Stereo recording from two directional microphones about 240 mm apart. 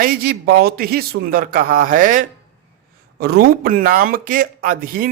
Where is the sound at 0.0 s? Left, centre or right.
Right.